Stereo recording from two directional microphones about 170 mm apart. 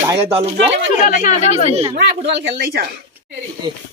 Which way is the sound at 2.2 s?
80° right.